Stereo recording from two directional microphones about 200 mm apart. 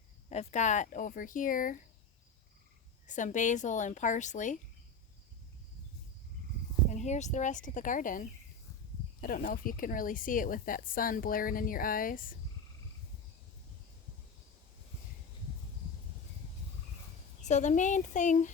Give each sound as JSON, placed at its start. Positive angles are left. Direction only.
{"t": 0.3, "sound": "speech", "side_deg": 35}
{"t": 3.1, "sound": "speech", "side_deg": 40}
{"t": 6.9, "sound": "speech", "side_deg": 35}
{"t": 17.5, "sound": "speech", "side_deg": 35}